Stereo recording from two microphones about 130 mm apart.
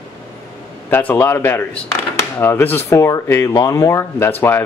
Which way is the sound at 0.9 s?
15° left (ahead or behind).